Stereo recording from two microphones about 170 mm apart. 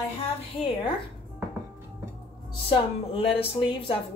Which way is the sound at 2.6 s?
30° left (ahead or behind).